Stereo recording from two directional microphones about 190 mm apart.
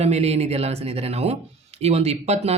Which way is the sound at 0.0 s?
35° right (ahead or behind).